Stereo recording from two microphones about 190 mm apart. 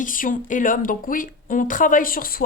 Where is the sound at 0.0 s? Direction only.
45° left (ahead or behind).